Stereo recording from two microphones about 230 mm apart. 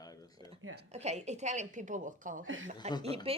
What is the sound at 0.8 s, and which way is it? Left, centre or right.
A woman's voice, right.